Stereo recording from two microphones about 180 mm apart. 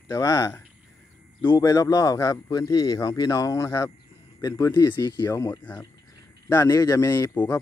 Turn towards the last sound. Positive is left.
turn(degrees=20)  # may be behind; listen again after turning